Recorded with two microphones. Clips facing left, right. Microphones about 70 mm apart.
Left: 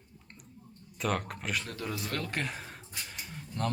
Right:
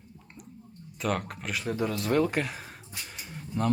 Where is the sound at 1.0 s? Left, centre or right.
Centre.